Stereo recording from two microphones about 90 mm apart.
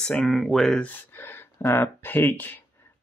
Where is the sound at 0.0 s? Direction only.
10° left (ahead or behind).